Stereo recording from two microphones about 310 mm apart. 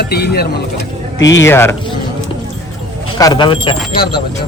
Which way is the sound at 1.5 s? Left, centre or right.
Centre.